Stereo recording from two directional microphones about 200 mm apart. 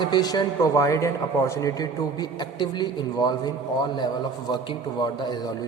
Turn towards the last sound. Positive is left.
turn(degrees=20)  # may be behind; listen again after turning